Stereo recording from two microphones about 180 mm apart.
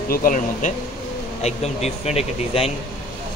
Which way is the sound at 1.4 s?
35° left (ahead or behind).